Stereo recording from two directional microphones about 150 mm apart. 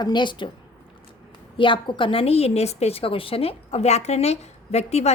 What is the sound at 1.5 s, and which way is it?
A woman's voice, 35° left (ahead or behind).